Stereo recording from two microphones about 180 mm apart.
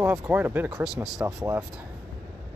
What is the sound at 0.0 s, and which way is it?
Speech, 10° right (ahead or behind).